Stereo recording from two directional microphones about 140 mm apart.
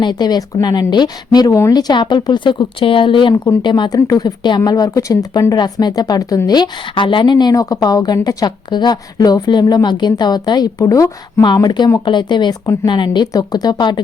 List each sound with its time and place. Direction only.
0.0 s speech: 30° left (ahead or behind)